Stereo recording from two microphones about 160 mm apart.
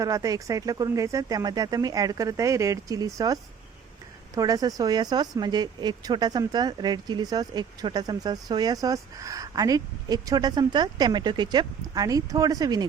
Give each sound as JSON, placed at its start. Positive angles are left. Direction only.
{"t": 0.0, "sound": "speech", "side_deg": -20}
{"t": 4.4, "sound": "speech", "side_deg": -20}